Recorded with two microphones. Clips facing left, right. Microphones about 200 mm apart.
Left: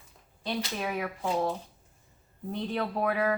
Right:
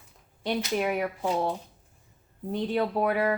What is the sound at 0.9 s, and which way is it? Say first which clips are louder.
Speech: right 2 dB; 15° right (ahead or behind).